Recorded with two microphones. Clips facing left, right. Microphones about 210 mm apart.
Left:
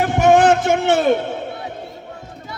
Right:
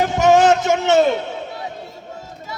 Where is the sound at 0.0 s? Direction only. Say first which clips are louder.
Left 1 dB; 55° left (ahead or behind).